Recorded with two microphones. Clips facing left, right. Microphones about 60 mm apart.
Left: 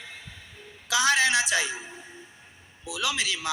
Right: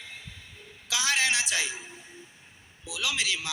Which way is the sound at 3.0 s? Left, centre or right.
Left.